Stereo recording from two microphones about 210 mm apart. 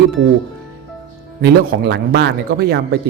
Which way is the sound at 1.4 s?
50° right (ahead or behind).